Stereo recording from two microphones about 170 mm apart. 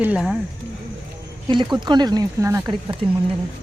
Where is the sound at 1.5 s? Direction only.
25° right (ahead or behind).